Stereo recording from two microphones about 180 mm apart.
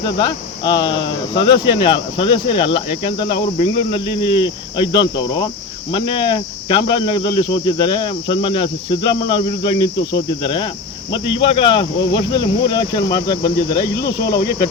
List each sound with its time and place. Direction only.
0.0 s speech: 25° left (ahead or behind)